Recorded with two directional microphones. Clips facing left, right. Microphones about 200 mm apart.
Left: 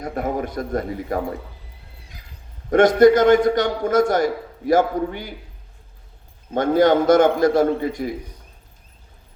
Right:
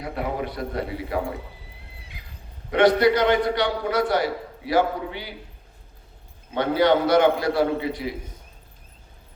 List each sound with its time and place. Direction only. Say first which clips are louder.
0.0 s a man's voice: left 3 dB; 45° left (ahead or behind)
2.2 s horse: right 2 dB; 40° left (ahead or behind)
2.6 s a man's voice: left 5 dB; 45° left (ahead or behind)
6.5 s a man's voice: left 4 dB; 45° left (ahead or behind)